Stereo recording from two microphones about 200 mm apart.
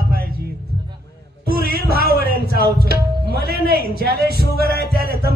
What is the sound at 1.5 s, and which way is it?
Music, 50° right (ahead or behind).